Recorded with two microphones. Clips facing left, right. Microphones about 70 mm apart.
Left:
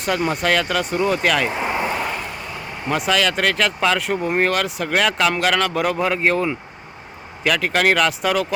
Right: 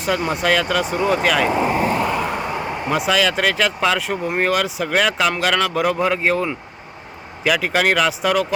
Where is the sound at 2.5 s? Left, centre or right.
Right.